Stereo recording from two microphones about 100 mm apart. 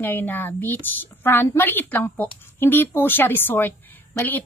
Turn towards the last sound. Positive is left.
turn(degrees=20)  # may be behind; listen again after turning